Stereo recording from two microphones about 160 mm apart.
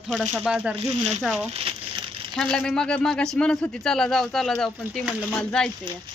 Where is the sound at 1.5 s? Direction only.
35° right (ahead or behind).